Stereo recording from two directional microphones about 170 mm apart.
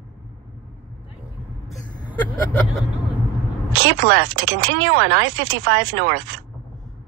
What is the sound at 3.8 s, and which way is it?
Speech, 90° right.